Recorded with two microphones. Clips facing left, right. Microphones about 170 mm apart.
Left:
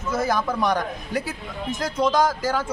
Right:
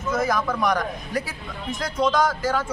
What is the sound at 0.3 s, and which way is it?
A man's voice, 30° left (ahead or behind).